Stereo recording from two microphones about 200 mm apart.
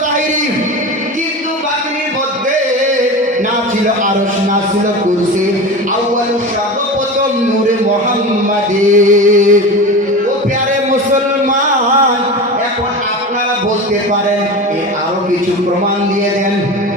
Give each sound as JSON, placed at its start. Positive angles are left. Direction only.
{"t": 8.9, "sound": "music", "side_deg": -40}